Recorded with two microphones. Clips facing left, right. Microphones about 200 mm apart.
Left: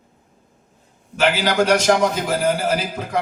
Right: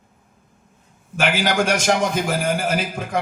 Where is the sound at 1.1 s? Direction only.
50° right (ahead or behind).